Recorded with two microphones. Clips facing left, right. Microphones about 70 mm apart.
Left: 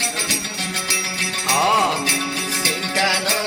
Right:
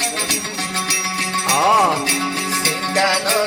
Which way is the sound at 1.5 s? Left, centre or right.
Centre.